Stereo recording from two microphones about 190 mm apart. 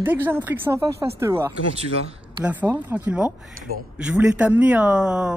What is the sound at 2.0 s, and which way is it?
Speech, 30° right (ahead or behind).